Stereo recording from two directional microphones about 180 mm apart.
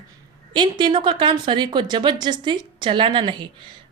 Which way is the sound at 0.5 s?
25° right (ahead or behind).